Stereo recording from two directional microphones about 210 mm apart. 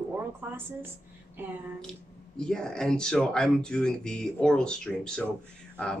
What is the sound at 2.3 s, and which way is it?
Speech, 5° left (ahead or behind).